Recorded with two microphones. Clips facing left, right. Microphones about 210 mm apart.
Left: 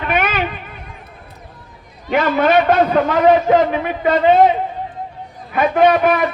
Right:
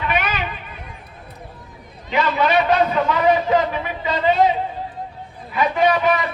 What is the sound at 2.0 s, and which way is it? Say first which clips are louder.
A man's voice: left 4 dB; 50° left (ahead or behind).